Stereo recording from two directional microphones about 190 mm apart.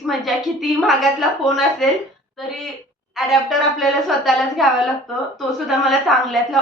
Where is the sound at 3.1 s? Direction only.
Centre (ahead or behind).